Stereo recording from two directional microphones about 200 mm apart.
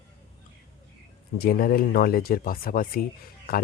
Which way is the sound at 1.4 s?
50° left (ahead or behind).